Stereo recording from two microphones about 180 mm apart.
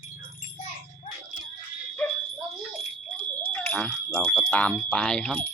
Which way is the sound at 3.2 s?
10° left (ahead or behind).